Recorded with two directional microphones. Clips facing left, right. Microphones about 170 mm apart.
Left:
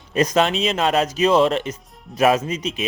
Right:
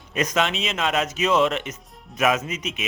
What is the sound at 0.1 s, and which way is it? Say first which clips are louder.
Speech: left 5 dB; 35° left (ahead or behind).